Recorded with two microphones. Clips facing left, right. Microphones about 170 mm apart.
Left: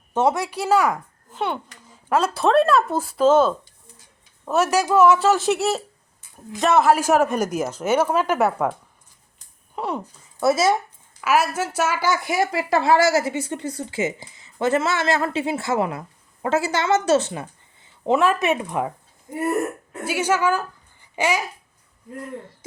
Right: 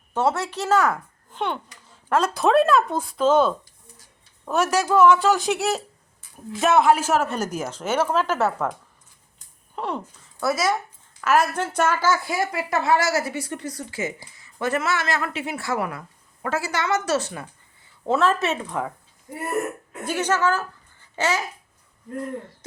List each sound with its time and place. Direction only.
0.1 s speech: 15° left (ahead or behind)
9.7 s speech: 10° left (ahead or behind)
10.4 s a woman's voice: 25° left (ahead or behind)
11.2 s a woman's voice: 5° left (ahead or behind)
20.1 s a woman's voice: 10° left (ahead or behind)